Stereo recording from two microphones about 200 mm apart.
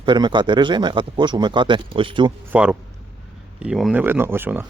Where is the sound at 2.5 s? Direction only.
5° right (ahead or behind).